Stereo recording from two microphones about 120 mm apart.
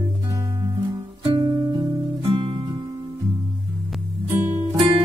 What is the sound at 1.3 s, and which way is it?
Music, 35° right (ahead or behind).